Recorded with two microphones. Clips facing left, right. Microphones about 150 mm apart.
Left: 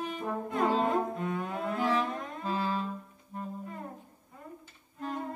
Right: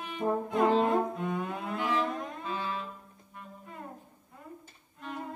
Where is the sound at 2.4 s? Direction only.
35° left (ahead or behind).